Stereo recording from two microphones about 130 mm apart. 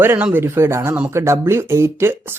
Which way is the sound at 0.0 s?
15° right (ahead or behind).